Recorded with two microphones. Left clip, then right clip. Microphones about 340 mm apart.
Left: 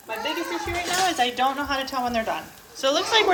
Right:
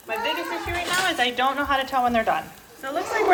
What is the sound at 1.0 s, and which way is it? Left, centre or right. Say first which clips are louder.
Speech: left 1 dB; centre.